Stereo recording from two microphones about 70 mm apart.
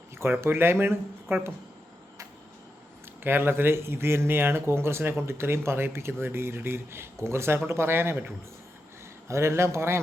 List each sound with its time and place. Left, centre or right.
0.2 s speech: right
3.2 s speech: right
9.3 s speech: right